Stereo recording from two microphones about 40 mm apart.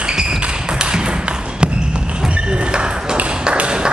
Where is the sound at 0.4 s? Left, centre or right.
Right.